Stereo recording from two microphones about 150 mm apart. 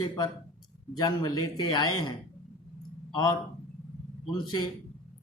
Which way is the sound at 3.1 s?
25° left (ahead or behind).